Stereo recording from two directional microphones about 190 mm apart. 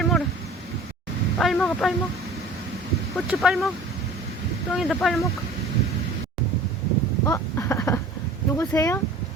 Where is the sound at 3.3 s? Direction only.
Centre (ahead or behind).